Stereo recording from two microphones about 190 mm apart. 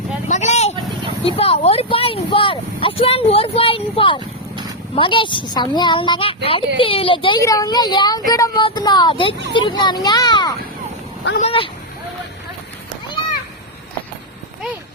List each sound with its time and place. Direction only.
0.3 s vehicle: 35° left (ahead or behind)
4.2 s vehicle: 25° right (ahead or behind)
4.9 s a woman's voice: 25° left (ahead or behind)
11.3 s speech: 30° left (ahead or behind)